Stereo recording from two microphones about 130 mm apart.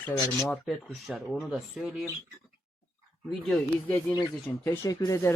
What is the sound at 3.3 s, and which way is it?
Speech, 5° left (ahead or behind).